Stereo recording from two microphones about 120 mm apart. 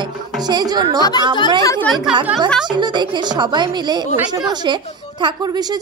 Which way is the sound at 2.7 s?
40° right (ahead or behind).